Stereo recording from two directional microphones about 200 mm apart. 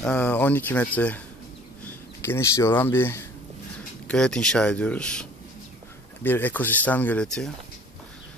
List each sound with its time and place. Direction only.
0.0 s speech: 5° left (ahead or behind)
6.2 s speech: 10° left (ahead or behind)